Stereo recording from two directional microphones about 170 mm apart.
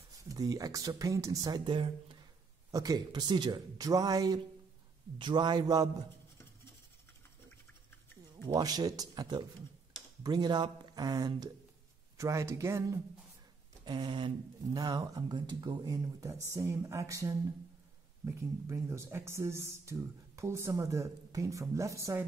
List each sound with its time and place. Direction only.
0.2 s speech: 20° right (ahead or behind)
8.5 s speech: 25° right (ahead or behind)
13.8 s speech: 25° right (ahead or behind)